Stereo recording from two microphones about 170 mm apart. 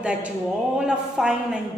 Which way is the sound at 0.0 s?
5° right (ahead or behind).